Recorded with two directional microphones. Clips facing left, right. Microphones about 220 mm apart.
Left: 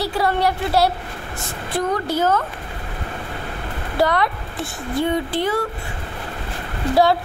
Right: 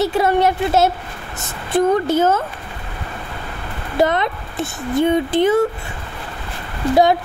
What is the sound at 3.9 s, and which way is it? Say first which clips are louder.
Speech: right 2 dB; 20° right (ahead or behind).